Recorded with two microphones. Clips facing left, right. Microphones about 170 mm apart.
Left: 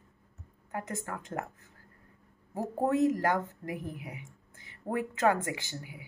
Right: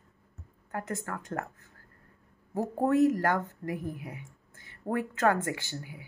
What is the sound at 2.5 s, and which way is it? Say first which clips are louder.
A woman's voice: right 3 dB; 20° left (ahead or behind).